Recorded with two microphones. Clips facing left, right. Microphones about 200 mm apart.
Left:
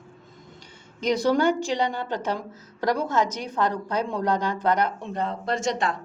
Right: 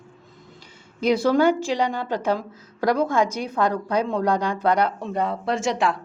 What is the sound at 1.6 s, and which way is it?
A woman's voice, 10° right (ahead or behind).